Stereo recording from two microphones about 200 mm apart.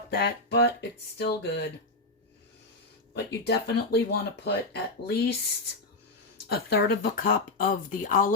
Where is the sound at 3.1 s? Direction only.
55° left (ahead or behind).